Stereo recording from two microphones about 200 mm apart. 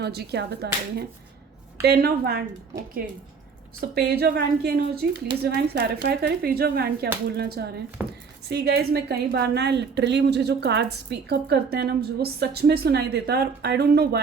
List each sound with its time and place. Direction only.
0.0 s a woman's voice: 55° right (ahead or behind)
3.8 s speech: 50° right (ahead or behind)
8.0 s a woman's voice: 10° right (ahead or behind)
8.4 s a woman's voice: 55° right (ahead or behind)